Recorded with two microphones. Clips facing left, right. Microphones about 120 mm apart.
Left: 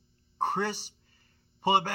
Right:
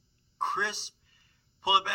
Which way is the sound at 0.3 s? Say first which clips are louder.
Left 2 dB; 45° left (ahead or behind).